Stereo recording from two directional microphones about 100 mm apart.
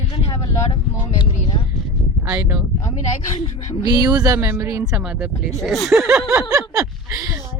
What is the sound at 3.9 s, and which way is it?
Speech, 40° right (ahead or behind).